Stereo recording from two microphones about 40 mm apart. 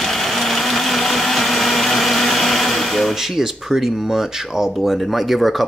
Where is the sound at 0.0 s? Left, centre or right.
Centre.